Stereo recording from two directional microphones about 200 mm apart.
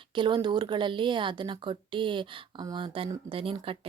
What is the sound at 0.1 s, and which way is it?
Speech, 25° right (ahead or behind).